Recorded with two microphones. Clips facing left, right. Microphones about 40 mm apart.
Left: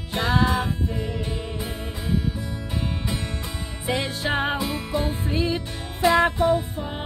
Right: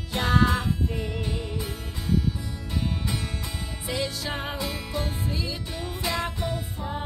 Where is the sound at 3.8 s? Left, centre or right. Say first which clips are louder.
Left 5 dB; left.